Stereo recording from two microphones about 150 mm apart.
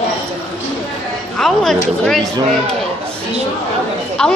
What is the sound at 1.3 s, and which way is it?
Speech, centre (ahead or behind).